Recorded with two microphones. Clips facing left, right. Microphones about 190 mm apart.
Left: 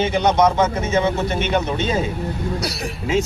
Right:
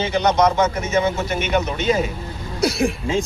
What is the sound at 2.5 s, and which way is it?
Speech, 50° right (ahead or behind).